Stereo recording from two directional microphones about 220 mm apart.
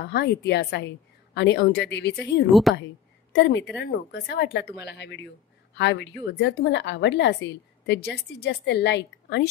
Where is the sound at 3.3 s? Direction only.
50° left (ahead or behind).